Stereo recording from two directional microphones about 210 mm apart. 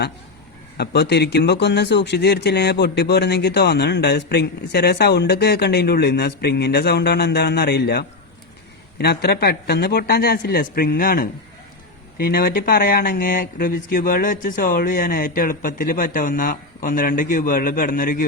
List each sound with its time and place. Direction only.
0.8 s speech: 50° left (ahead or behind)